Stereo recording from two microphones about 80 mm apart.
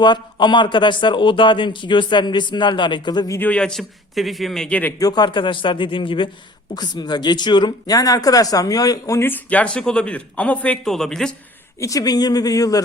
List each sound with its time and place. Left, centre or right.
0.0 s a man's voice: left
3.4 s speech: centre
3.8 s speech: centre
4.7 s speech: left
4.9 s a man's voice: left
6.7 s speech: left
9.2 s speech: left
10.8 s speech: centre
11.8 s speech: left